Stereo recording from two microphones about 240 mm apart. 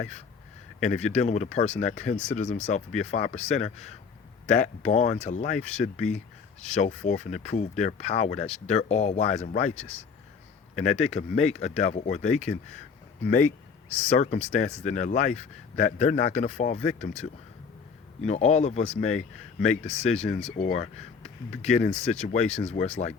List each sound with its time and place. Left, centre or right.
0.8 s speech: left
14.1 s speech: left
18.3 s speech: left